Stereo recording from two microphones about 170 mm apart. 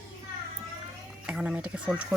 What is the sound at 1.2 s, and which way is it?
Speech, 5° right (ahead or behind).